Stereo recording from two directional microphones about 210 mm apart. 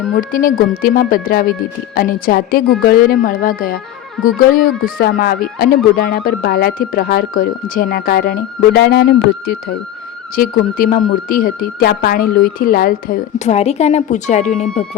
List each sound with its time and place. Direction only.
0.2 s speech: 40° left (ahead or behind)